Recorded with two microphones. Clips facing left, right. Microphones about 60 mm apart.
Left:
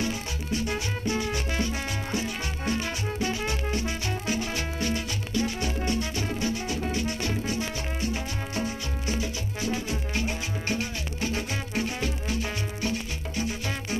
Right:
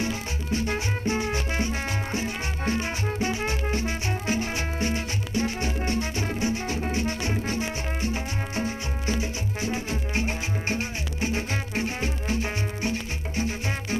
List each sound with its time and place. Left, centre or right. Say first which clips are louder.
0.0 s music: right 1 dB; right